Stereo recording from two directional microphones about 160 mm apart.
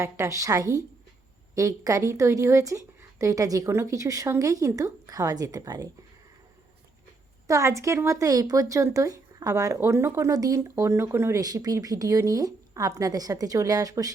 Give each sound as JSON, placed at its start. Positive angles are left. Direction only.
{"t": 0.0, "sound": "speech", "side_deg": -20}
{"t": 7.4, "sound": "speech", "side_deg": -20}